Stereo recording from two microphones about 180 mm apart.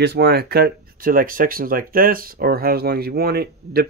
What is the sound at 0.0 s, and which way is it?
Speech, 65° right (ahead or behind).